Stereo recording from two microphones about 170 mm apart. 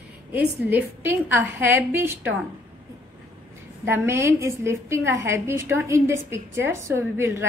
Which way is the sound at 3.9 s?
15° right (ahead or behind).